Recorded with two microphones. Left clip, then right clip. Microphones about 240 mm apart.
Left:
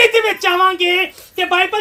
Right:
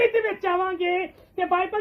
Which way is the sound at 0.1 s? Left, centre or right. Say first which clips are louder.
Left 9 dB; centre.